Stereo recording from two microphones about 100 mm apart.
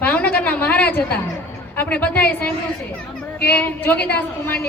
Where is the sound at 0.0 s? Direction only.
15° left (ahead or behind).